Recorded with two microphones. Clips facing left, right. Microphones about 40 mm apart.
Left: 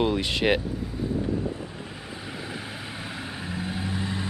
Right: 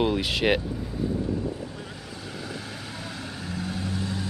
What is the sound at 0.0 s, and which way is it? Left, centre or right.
Speech, centre.